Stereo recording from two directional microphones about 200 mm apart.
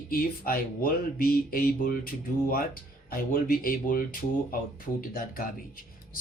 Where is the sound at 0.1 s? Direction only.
45° left (ahead or behind).